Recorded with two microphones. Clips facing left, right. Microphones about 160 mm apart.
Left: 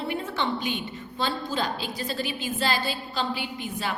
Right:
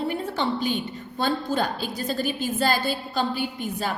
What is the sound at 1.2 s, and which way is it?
A woman's voice, 50° right (ahead or behind).